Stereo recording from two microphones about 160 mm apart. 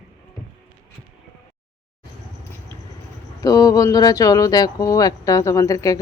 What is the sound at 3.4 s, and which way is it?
Speech, 25° left (ahead or behind).